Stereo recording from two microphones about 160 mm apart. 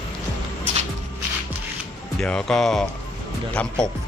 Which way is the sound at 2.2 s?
5° left (ahead or behind).